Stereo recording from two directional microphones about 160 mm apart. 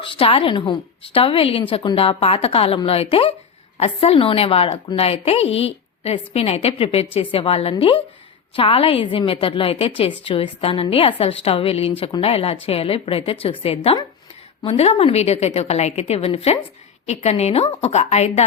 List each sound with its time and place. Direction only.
0.0 s a woman's voice: 35° left (ahead or behind)